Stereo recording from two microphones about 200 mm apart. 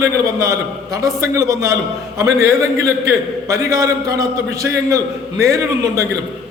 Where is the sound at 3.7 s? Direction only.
15° right (ahead or behind).